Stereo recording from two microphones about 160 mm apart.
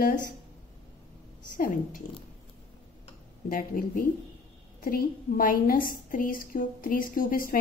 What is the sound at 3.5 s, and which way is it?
A woman's voice, 60° left (ahead or behind).